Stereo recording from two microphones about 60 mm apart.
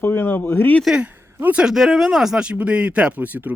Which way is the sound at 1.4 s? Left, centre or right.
Right.